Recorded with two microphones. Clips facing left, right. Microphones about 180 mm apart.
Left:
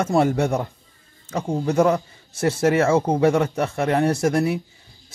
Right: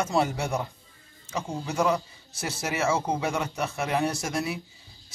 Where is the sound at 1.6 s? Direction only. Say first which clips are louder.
Left 7 dB; 55° left (ahead or behind).